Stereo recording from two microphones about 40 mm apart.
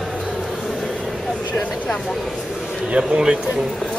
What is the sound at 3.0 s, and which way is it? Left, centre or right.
Speech, centre.